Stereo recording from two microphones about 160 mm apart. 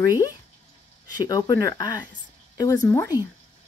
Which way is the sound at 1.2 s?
25° left (ahead or behind).